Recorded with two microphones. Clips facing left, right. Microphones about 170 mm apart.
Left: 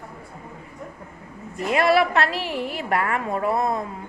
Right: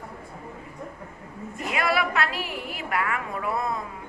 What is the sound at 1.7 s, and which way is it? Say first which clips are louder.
A woman's voice: left 7 dB; 35° left (ahead or behind).